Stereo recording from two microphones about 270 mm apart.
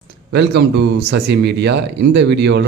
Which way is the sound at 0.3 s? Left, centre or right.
Right.